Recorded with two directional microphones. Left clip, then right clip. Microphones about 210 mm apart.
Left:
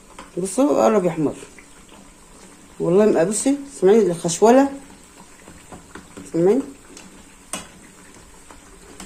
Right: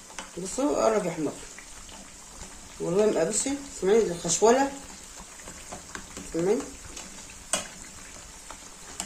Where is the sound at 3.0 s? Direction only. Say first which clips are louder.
Left 7 dB; 50° left (ahead or behind).